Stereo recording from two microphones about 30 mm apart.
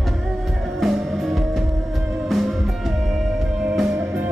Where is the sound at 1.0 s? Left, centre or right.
Centre.